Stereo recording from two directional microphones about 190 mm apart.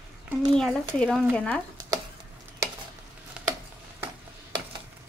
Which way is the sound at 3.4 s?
5° right (ahead or behind).